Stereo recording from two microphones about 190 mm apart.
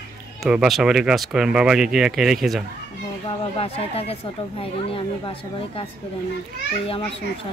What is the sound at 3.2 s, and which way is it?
Speech, 30° left (ahead or behind).